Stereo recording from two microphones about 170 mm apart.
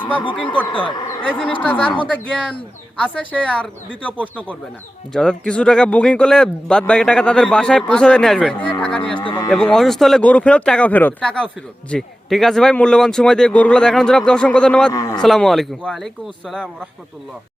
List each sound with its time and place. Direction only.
0.5 s speech: 10° left (ahead or behind)
0.8 s speech: 30° left (ahead or behind)
1.2 s speech: 5° left (ahead or behind)
9.1 s a sound: 25° left (ahead or behind)
9.5 s speech: 5° left (ahead or behind)
14.9 s speech: 20° left (ahead or behind)
15.2 s speech: centre (ahead or behind)